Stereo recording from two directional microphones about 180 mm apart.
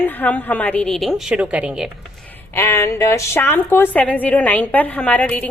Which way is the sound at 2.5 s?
15° left (ahead or behind).